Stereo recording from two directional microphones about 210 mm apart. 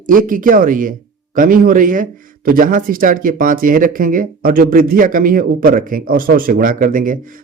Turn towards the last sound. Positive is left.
turn(degrees=-40)  # may be behind; listen again after turning